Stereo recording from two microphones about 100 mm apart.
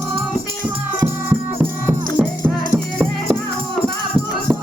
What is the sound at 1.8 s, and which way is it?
Music, 15° right (ahead or behind).